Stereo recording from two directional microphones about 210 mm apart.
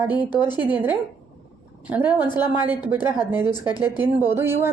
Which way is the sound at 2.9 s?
10° right (ahead or behind).